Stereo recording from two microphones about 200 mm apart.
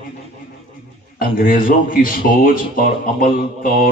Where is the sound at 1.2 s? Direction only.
45° left (ahead or behind).